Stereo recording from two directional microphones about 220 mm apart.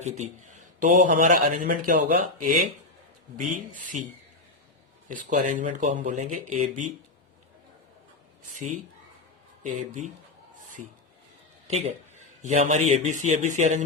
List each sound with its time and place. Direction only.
0.0 s a man's voice: 30° right (ahead or behind)
5.0 s a man's voice: 35° right (ahead or behind)
8.5 s a man's voice: 35° right (ahead or behind)
12.4 s a man's voice: 35° right (ahead or behind)